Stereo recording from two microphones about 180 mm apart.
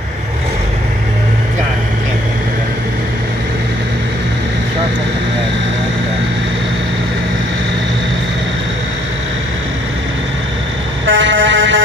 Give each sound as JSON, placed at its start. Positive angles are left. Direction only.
{"t": 11.1, "sound": "vehicle", "side_deg": -90}